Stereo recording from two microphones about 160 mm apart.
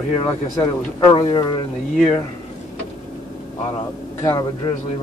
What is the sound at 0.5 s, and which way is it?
Speech, 30° left (ahead or behind).